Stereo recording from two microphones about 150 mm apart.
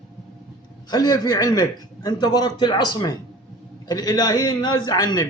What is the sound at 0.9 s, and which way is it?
A man's voice, 25° left (ahead or behind).